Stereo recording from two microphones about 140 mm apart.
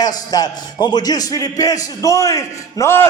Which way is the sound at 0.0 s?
25° left (ahead or behind).